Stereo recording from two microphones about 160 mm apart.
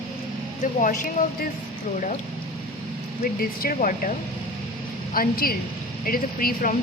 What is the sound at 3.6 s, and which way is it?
Speech, 60° left (ahead or behind).